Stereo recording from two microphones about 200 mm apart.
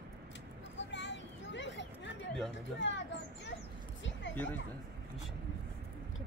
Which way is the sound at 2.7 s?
65° left (ahead or behind).